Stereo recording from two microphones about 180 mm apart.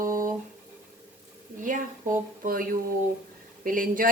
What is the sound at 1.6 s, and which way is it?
Speech, 45° right (ahead or behind).